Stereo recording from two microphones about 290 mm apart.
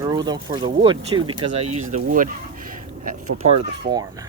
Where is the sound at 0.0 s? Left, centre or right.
Centre.